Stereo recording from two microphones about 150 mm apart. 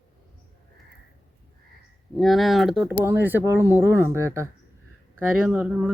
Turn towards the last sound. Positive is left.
turn(degrees=-5)  # may be behind; listen again after turning